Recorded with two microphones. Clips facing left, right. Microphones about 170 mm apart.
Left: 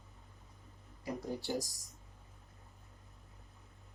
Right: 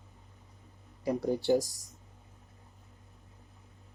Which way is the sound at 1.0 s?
70° right (ahead or behind).